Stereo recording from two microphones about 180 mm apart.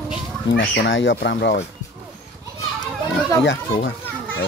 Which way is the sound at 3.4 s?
90° left.